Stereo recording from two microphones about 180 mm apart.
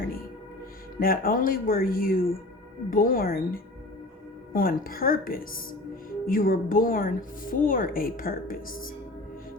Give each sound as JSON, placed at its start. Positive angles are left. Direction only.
{"t": 0.9, "sound": "speech", "side_deg": 55}